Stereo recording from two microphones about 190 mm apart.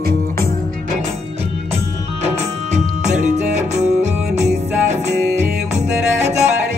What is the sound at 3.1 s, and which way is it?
Music, 40° right (ahead or behind).